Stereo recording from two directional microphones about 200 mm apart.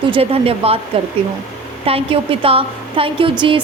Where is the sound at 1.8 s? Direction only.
30° right (ahead or behind).